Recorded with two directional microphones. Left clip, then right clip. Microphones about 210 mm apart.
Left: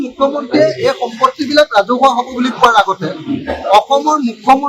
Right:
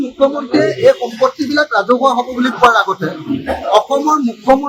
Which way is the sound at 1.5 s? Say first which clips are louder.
Left 2 dB; centre (ahead or behind).